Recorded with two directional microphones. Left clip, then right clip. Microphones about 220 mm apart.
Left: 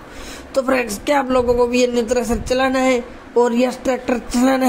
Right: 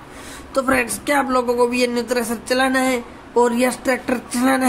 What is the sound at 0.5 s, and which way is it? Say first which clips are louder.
Speech: left 1 dB; 10° left (ahead or behind).